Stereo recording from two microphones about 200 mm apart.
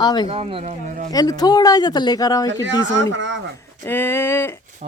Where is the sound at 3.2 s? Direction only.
65° right (ahead or behind).